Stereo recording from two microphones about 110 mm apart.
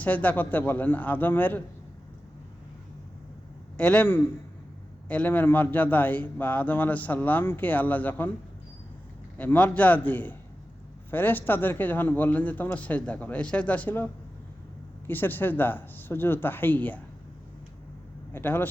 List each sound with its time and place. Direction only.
0.0 s a man's voice: 15° left (ahead or behind)
3.8 s a man's voice: 15° left (ahead or behind)
9.4 s a man's voice: 15° left (ahead or behind)
18.3 s speech: 20° left (ahead or behind)